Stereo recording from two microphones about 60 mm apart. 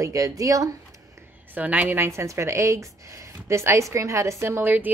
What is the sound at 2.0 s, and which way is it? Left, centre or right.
Speech, right.